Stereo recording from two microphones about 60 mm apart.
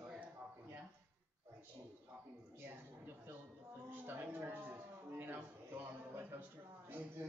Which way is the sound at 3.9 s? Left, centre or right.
Right.